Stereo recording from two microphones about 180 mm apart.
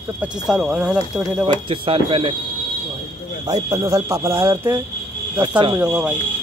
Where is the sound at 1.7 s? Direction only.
30° right (ahead or behind).